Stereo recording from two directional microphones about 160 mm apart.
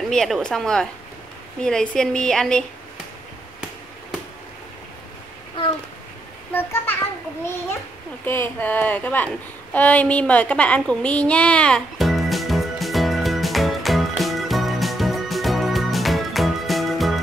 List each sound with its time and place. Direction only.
0.1 s a woman's voice: 5° left (ahead or behind)
6.5 s a child's voice: 15° left (ahead or behind)
8.3 s a sound: 10° left (ahead or behind)